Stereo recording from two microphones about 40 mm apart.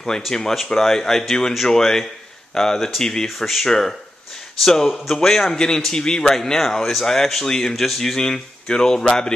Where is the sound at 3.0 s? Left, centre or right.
Centre.